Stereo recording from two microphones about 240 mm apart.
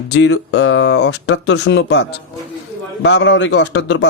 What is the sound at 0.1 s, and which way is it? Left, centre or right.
Speech, left.